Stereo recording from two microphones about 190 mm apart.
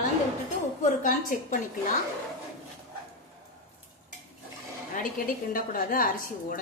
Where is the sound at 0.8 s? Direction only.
45° left (ahead or behind).